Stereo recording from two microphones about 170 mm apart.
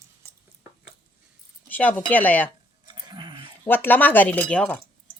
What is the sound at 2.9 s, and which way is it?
Sheep, 25° right (ahead or behind).